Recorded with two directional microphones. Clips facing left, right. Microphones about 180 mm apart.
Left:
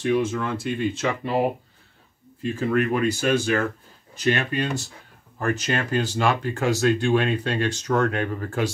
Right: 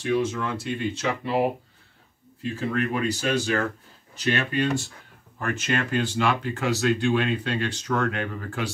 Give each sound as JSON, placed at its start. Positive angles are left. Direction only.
{"t": 0.2, "sound": "speech", "side_deg": 50}
{"t": 2.7, "sound": "speech", "side_deg": 55}